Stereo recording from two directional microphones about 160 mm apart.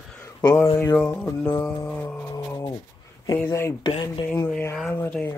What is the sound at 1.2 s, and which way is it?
Speech, 10° left (ahead or behind).